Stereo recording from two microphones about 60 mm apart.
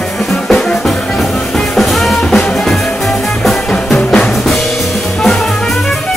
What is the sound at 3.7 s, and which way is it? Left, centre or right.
Music, centre.